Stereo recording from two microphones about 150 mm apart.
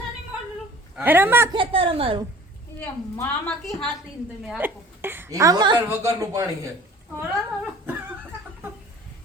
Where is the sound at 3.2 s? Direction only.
15° left (ahead or behind).